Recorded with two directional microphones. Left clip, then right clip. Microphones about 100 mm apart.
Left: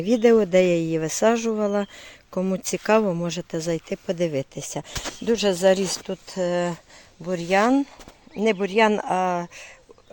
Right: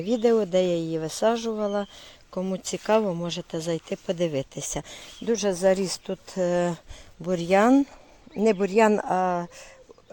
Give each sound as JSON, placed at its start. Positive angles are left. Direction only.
{"t": 0.0, "sound": "speech", "side_deg": 60}
{"t": 3.5, "sound": "speech", "side_deg": 35}
{"t": 3.9, "sound": "speech", "side_deg": 20}
{"t": 5.2, "sound": "speech", "side_deg": 25}
{"t": 6.2, "sound": "speech", "side_deg": -25}
{"t": 8.4, "sound": "speech", "side_deg": -15}
{"t": 9.0, "sound": "speech", "side_deg": 0}